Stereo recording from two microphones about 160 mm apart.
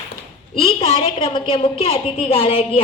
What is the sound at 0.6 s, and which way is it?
A woman's voice, 35° left (ahead or behind).